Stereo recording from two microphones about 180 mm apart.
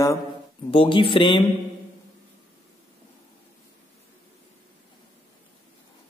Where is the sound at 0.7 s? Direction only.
30° left (ahead or behind).